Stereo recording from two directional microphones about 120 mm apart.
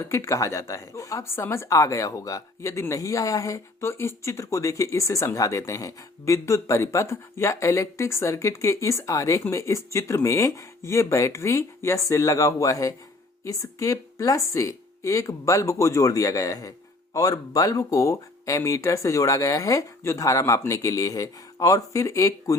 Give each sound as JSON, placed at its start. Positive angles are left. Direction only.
{"t": 0.0, "sound": "speech", "side_deg": 25}